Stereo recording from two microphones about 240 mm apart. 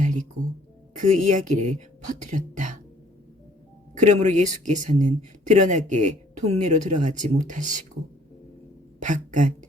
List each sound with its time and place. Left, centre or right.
0.0 s music: right
0.9 s speech: right
3.9 s speech: right
9.0 s a woman's voice: right